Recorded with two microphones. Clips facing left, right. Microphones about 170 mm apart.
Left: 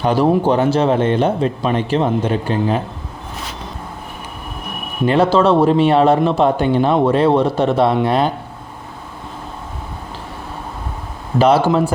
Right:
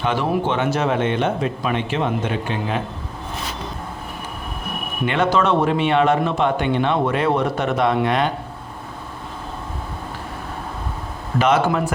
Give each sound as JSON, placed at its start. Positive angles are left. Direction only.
{"t": 0.0, "sound": "speech", "side_deg": 35}
{"t": 5.0, "sound": "speech", "side_deg": 35}
{"t": 11.3, "sound": "speech", "side_deg": 35}